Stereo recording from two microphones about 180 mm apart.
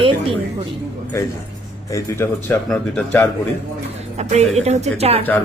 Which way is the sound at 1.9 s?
15° left (ahead or behind).